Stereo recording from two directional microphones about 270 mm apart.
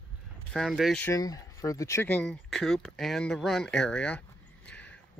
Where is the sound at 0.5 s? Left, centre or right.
Centre.